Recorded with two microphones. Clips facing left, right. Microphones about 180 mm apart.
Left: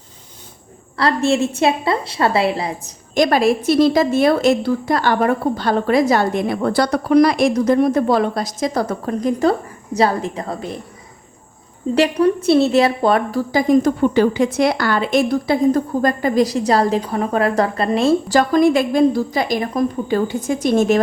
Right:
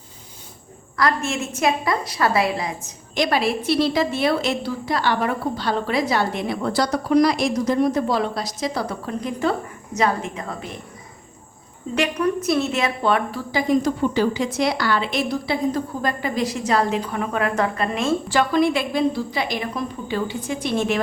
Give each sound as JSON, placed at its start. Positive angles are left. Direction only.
{"t": 0.9, "sound": "a woman's voice", "side_deg": 30}
{"t": 3.2, "sound": "a woman's voice", "side_deg": 45}
{"t": 11.9, "sound": "a woman's voice", "side_deg": 30}